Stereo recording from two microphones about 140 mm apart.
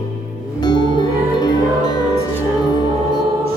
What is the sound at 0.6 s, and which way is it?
Music, 30° left (ahead or behind).